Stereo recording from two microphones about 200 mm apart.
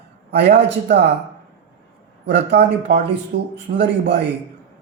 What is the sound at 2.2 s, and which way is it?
A man's voice, 60° right (ahead or behind).